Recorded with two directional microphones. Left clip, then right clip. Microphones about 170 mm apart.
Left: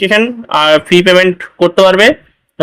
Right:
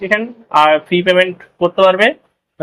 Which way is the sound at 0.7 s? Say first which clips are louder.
Left 5 dB; 35° left (ahead or behind).